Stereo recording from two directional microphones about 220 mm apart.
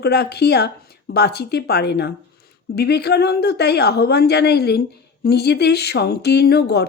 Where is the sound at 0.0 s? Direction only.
45° left (ahead or behind).